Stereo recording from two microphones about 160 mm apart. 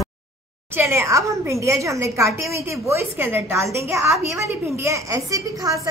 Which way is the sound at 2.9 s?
15° right (ahead or behind).